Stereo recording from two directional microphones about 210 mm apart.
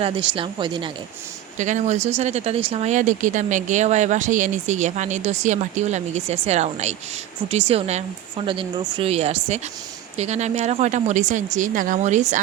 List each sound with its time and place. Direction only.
0.0 s speech: 25° right (ahead or behind)
1.5 s speech: 35° right (ahead or behind)